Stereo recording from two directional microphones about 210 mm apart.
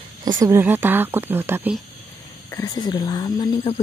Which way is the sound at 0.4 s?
15° right (ahead or behind).